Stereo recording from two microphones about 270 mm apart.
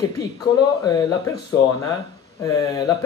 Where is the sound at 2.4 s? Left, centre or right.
Centre.